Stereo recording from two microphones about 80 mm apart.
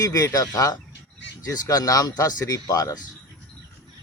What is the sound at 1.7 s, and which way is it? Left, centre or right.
Speech, left.